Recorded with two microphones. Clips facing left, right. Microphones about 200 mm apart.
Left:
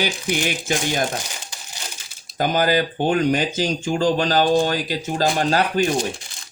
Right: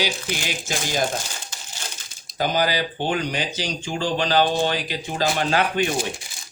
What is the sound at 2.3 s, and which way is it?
Speech, 50° left (ahead or behind).